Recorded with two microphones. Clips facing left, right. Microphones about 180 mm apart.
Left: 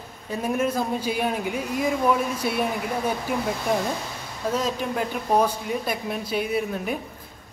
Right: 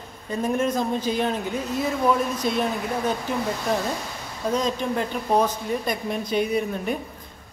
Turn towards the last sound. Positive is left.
turn(degrees=5)  # may be behind; listen again after turning